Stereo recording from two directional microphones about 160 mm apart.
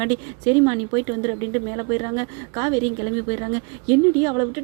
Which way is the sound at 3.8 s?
20° right (ahead or behind).